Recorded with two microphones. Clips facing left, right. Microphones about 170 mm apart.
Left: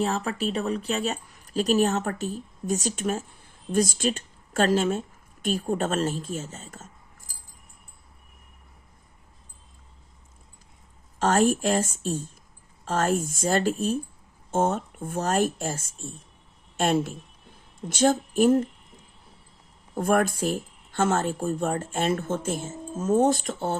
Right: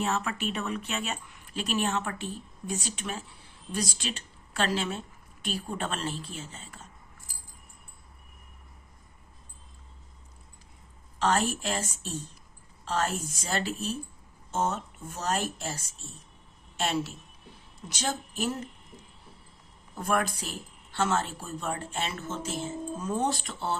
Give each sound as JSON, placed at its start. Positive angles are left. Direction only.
{"t": 0.0, "sound": "speech", "side_deg": 35}
{"t": 11.2, "sound": "a woman's voice", "side_deg": 50}
{"t": 19.9, "sound": "speech", "side_deg": 50}